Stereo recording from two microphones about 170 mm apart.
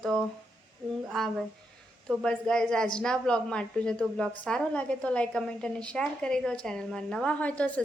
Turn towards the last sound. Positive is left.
turn(degrees=10)  # may be behind; listen again after turning